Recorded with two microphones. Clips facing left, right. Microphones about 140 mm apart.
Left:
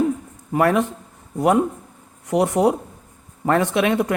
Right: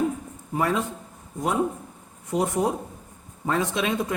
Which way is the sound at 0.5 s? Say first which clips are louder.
Left 7 dB; 65° left (ahead or behind).